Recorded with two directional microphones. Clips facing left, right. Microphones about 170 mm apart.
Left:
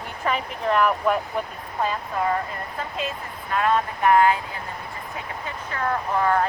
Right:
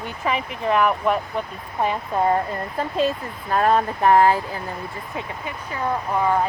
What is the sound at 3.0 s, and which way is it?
Speech, 35° right (ahead or behind).